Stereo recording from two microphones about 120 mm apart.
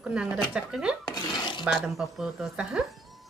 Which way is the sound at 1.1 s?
35° left (ahead or behind).